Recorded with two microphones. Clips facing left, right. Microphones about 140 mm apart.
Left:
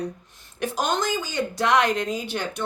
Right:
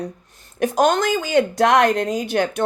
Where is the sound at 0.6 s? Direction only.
50° right (ahead or behind).